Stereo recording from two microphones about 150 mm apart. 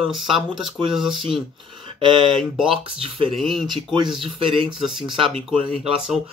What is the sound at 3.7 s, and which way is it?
Speech, 30° right (ahead or behind).